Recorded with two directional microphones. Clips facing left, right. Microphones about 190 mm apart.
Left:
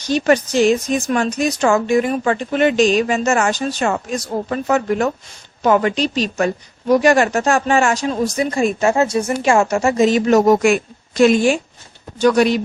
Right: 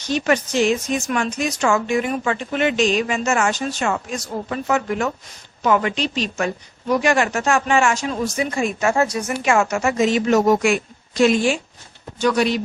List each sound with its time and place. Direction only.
0.1 s a woman's voice: 40° left (ahead or behind)
8.9 s a woman's voice: 25° left (ahead or behind); by 12.5 s 50° left (ahead or behind)